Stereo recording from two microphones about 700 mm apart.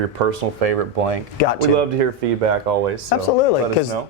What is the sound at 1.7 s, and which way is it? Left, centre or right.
Speech, right.